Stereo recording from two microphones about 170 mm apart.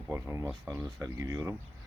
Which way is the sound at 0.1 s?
15° right (ahead or behind).